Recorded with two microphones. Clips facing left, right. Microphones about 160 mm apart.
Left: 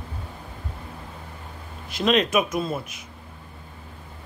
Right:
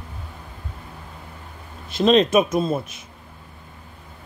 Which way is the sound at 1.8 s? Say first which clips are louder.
Right 5 dB; 30° right (ahead or behind).